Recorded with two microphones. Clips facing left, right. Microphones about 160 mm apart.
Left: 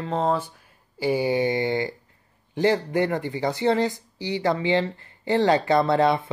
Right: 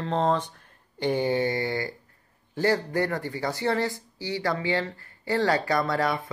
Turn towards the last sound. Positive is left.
turn(degrees=25)  # may be behind; listen again after turning